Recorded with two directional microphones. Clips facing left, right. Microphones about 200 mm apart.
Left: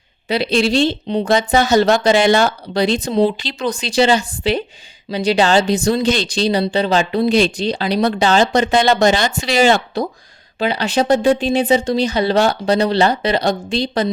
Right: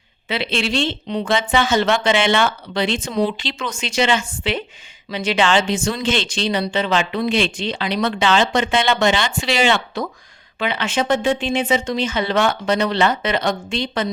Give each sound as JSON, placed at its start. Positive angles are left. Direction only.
{"t": 0.3, "sound": "speech", "side_deg": 40}